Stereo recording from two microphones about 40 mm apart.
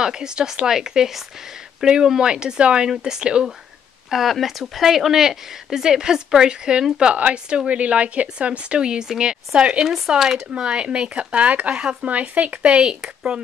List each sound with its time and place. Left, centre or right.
0.0 s speech: centre
4.1 s speech: centre; by 7.2 s right
7.2 s speech: right; by 10.4 s centre
10.5 s speech: right
11.7 s speech: right
12.1 s speech: right
13.0 s speech: centre